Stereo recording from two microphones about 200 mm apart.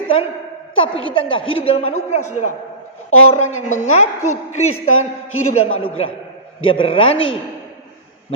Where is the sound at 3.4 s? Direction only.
90° left.